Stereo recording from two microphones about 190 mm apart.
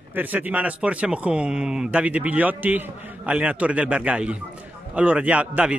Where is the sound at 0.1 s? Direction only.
10° right (ahead or behind).